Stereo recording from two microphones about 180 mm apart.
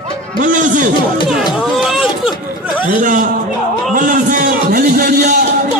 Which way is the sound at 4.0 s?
50° right (ahead or behind).